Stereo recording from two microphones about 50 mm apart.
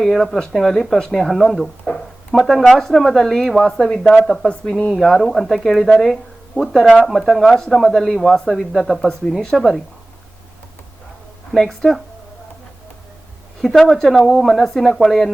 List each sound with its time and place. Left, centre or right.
0.0 s speech: centre
0.6 s speech: centre
7.5 s speech: centre
11.5 s speech: centre
13.6 s speech: centre